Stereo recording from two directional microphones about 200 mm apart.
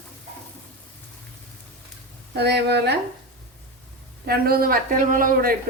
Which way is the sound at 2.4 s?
55° right (ahead or behind).